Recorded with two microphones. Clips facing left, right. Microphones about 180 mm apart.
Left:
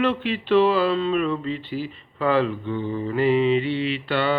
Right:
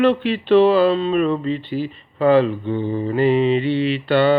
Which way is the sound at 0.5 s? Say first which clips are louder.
Right 5 dB; 30° right (ahead or behind).